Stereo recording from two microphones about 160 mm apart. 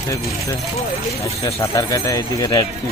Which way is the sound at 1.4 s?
20° left (ahead or behind).